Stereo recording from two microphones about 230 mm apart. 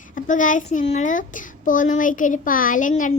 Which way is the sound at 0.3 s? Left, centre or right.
Left.